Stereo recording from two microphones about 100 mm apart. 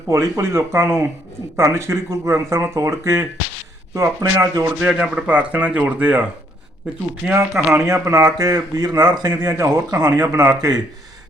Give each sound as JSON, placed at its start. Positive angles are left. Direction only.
{"t": 0.1, "sound": "speech", "side_deg": -30}
{"t": 4.6, "sound": "speech", "side_deg": -15}
{"t": 7.3, "sound": "speech", "side_deg": -25}